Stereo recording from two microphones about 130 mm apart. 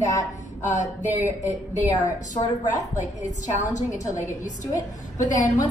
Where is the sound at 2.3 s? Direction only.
30° left (ahead or behind).